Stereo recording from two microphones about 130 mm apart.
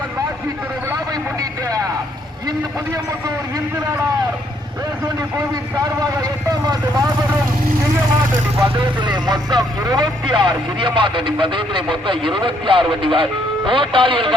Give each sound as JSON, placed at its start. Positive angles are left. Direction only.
{"t": 1.6, "sound": "vehicle", "side_deg": -25}
{"t": 6.5, "sound": "speech", "side_deg": -30}
{"t": 8.7, "sound": "speech", "side_deg": -35}